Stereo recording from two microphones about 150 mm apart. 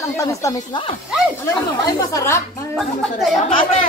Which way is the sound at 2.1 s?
20° left (ahead or behind).